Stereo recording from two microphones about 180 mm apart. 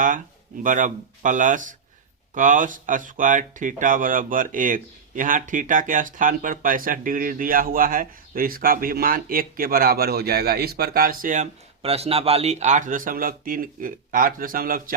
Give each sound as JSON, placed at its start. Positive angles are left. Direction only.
{"t": 0.6, "sound": "speech", "side_deg": -45}